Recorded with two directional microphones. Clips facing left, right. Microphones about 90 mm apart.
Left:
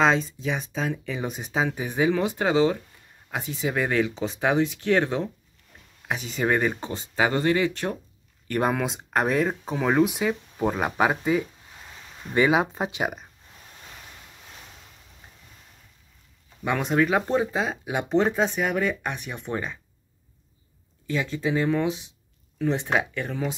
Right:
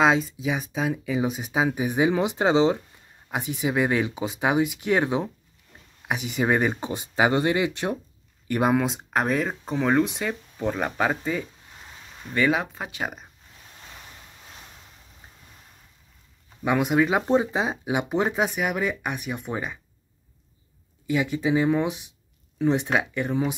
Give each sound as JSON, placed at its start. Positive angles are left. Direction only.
{"t": 0.0, "sound": "speech", "side_deg": -10}
{"t": 8.5, "sound": "speech", "side_deg": -5}
{"t": 16.6, "sound": "speech", "side_deg": -10}
{"t": 21.1, "sound": "speech", "side_deg": -15}